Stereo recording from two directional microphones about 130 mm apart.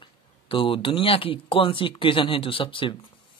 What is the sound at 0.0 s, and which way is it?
A man's voice, 40° left (ahead or behind).